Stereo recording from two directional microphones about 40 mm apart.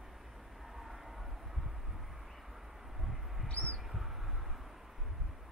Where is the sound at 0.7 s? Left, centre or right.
Centre.